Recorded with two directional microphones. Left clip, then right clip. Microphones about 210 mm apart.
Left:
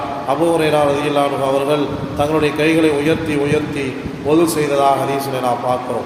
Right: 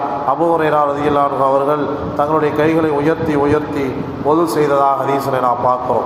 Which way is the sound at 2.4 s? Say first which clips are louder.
Even; 40° right (ahead or behind).